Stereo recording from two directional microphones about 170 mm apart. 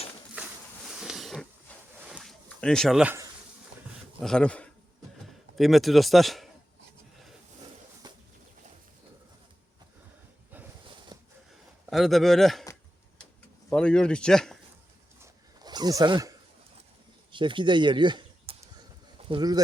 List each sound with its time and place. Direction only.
0.3 s a sound: 5° right (ahead or behind)
2.6 s speech: 5° left (ahead or behind)
3.0 s speech: 10° right (ahead or behind)
4.2 s speech: 5° left (ahead or behind)
8.0 s bird flight: 25° right (ahead or behind)
11.1 s a sound: 25° right (ahead or behind)
11.9 s speech: centre (ahead or behind)
13.7 s speech: 5° left (ahead or behind)
15.2 s a sound: 25° right (ahead or behind)
17.3 s speech: 30° right (ahead or behind)